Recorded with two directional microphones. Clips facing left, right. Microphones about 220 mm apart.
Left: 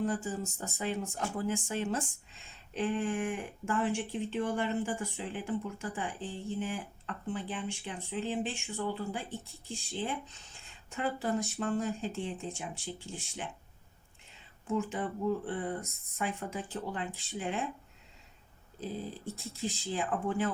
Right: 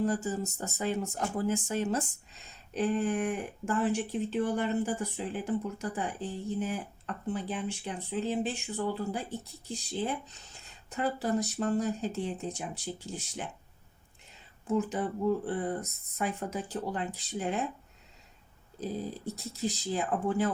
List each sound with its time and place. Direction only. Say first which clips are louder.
0.0 s speech: right 3 dB; 40° right (ahead or behind)
14.7 s speech: right 3 dB; 40° right (ahead or behind)
18.8 s speech: right 3 dB; 40° right (ahead or behind)